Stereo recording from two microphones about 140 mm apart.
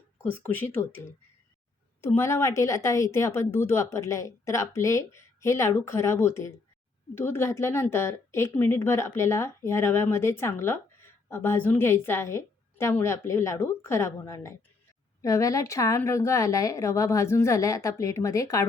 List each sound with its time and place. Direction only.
0.2 s a woman's voice: 15° left (ahead or behind)